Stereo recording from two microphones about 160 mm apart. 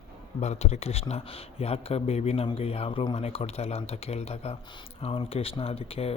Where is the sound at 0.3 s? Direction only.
45° left (ahead or behind).